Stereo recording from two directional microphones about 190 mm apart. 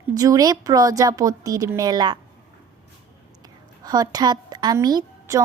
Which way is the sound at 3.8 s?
20° right (ahead or behind).